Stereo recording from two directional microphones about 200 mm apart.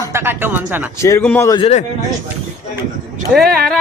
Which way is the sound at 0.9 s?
15° left (ahead or behind).